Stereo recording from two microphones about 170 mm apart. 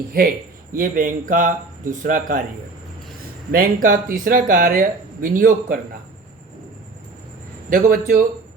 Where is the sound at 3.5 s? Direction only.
55° right (ahead or behind).